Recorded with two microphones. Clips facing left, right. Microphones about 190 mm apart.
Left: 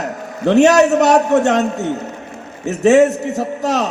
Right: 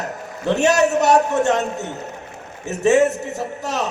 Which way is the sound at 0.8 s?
70° left (ahead or behind).